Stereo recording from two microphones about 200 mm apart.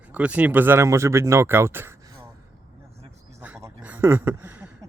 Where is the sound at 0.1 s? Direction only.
5° right (ahead or behind).